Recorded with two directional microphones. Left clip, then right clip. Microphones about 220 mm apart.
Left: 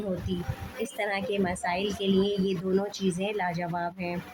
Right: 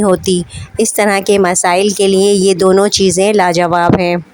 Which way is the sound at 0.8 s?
50° right (ahead or behind).